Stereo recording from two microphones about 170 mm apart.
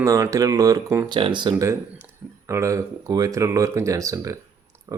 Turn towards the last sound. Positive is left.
turn(degrees=-20)  # may be behind; listen again after turning